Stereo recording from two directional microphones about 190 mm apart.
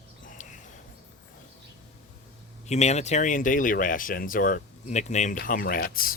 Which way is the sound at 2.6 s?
35° left (ahead or behind).